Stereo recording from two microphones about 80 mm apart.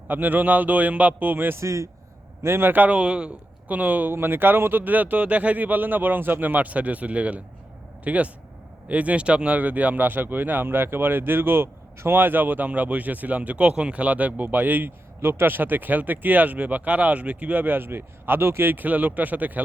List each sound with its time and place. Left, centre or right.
0.1 s speech: right